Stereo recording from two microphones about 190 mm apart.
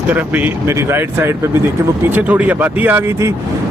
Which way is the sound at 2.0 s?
10° right (ahead or behind).